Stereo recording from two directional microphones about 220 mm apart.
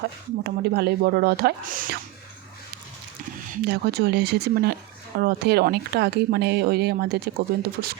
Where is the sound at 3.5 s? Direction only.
45° right (ahead or behind).